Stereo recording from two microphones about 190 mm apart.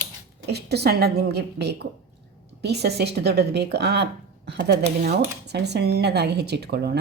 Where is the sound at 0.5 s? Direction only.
60° right (ahead or behind).